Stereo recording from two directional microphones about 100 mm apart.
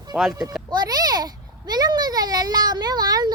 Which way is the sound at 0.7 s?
40° right (ahead or behind).